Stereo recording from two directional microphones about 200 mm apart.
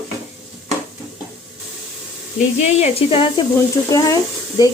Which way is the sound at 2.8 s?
25° left (ahead or behind).